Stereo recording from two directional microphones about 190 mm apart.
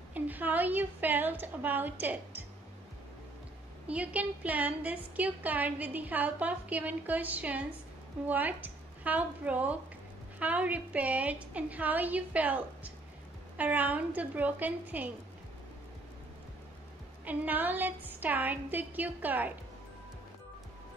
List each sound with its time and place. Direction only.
0.1 s a woman's voice: 10° right (ahead or behind)
3.8 s a woman's voice: 5° right (ahead or behind)
17.2 s a woman's voice: 10° right (ahead or behind)